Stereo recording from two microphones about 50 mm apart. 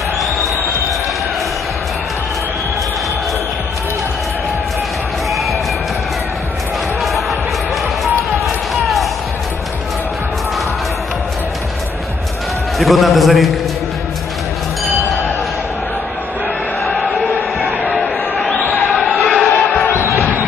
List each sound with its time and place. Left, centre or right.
7.0 s a sound: centre
8.7 s basketball bounce: centre
12.7 s a man's voice: centre
16.8 s chant: centre
17.9 s a sound: centre
19.9 s music: left